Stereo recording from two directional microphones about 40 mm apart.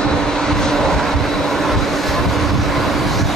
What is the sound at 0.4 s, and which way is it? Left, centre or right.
Vehicle, centre.